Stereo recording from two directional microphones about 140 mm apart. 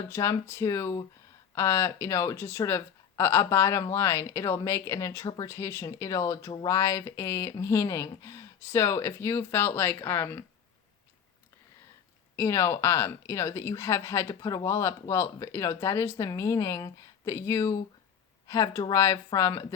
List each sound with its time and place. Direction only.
0.1 s speech: 20° left (ahead or behind)
12.4 s speech: 20° left (ahead or behind)